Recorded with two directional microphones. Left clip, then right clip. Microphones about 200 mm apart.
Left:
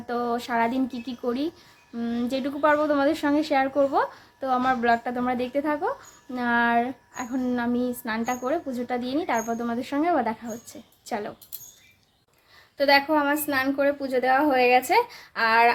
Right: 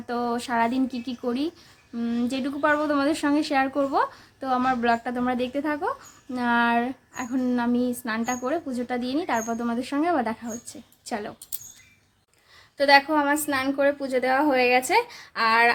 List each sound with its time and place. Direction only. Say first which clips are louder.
0.1 s speech: even; 10° right (ahead or behind)
12.7 s a woman's voice: right 2 dB; 5° right (ahead or behind)